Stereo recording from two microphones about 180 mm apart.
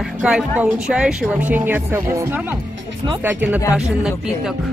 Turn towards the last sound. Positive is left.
turn(degrees=-10)  # may be behind; listen again after turning